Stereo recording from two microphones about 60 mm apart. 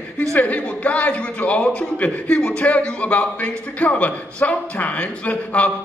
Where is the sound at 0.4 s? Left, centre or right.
Left.